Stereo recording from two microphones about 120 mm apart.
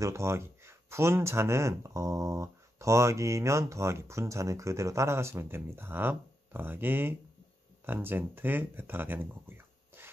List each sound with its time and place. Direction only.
0.0 s speech: 25° right (ahead or behind)